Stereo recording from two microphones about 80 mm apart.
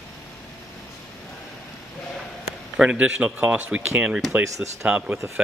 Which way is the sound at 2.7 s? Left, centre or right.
Centre.